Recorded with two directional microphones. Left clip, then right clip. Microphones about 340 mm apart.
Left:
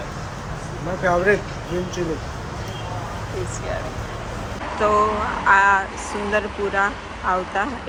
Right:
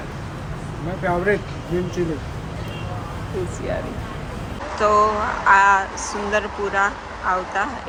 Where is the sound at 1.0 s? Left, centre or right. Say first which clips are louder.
Left 2 dB; centre.